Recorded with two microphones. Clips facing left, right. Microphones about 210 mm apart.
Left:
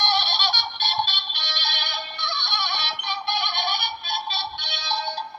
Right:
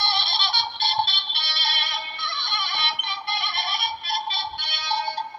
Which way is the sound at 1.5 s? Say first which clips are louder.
Left 1 dB; 35° left (ahead or behind).